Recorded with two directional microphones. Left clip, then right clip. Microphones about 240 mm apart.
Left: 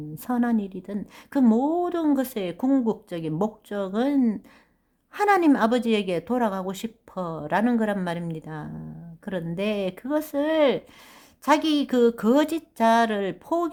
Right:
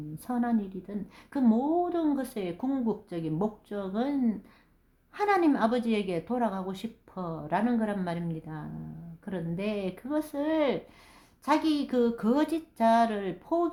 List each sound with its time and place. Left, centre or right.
0.3 s a woman's voice: left